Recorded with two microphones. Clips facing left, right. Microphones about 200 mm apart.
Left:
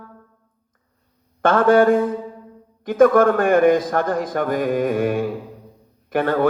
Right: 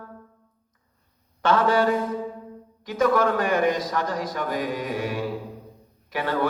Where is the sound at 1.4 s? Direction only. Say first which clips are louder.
Left 6 dB; 50° left (ahead or behind).